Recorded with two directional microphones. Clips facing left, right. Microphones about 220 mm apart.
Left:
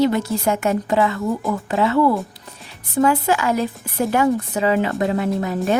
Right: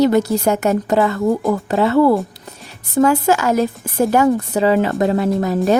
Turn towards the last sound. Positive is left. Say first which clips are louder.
# right 4 dB
turn(degrees=-40)  # may be behind; listen again after turning